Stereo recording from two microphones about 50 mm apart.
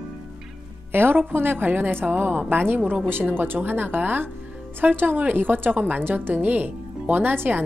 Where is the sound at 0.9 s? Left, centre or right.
Right.